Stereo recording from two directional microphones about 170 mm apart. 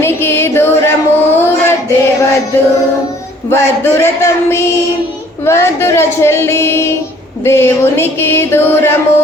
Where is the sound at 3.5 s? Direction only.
15° left (ahead or behind).